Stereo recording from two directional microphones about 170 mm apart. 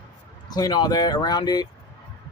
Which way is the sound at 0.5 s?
25° left (ahead or behind).